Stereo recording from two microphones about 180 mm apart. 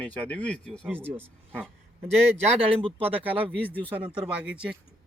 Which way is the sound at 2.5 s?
30° right (ahead or behind).